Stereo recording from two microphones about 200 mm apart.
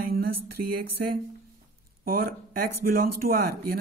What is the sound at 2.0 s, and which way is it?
Speech, 45° right (ahead or behind).